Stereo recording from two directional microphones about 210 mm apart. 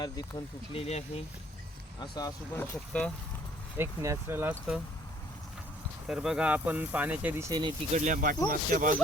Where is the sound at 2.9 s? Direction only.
5° left (ahead or behind).